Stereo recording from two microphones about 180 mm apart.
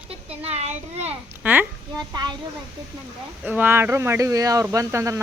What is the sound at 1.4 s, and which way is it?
Babbling, 10° right (ahead or behind).